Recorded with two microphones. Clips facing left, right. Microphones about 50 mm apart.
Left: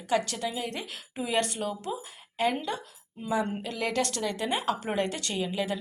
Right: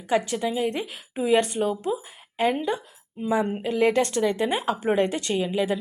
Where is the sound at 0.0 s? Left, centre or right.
Centre.